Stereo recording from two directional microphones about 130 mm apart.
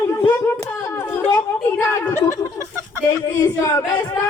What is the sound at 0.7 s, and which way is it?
Speech, 20° left (ahead or behind).